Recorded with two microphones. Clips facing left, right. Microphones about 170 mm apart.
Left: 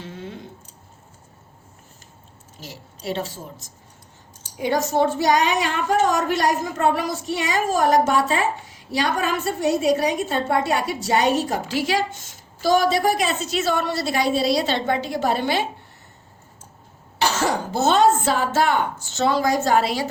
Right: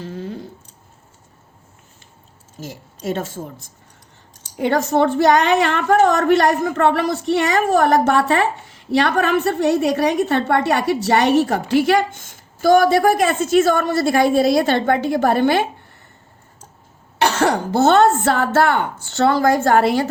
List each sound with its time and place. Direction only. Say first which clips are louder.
0.0 s a sound: right 6 dB; 40° right (ahead or behind)
2.6 s a woman's voice: right 7 dB; 50° right (ahead or behind)
4.5 s speech: right 4 dB; 60° right (ahead or behind)
17.2 s speech: right 5 dB; 60° right (ahead or behind)